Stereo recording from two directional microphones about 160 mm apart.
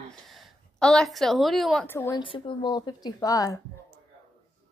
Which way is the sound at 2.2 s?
30° left (ahead or behind).